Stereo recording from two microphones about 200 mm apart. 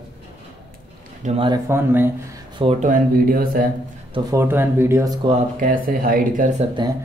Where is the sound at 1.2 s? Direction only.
25° right (ahead or behind).